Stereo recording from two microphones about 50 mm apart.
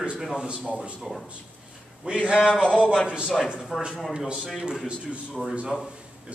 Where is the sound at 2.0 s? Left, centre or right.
Centre.